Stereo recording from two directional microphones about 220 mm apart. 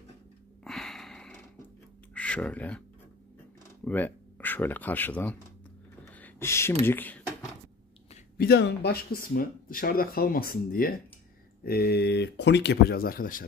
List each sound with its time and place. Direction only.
0.7 s a sound: centre (ahead or behind)
2.1 s speech: 5° left (ahead or behind)
3.8 s speech: 10° left (ahead or behind)
6.1 s a sound: 10° left (ahead or behind)
6.9 s speech: 10° left (ahead or behind)
8.4 s speech: 50° left (ahead or behind)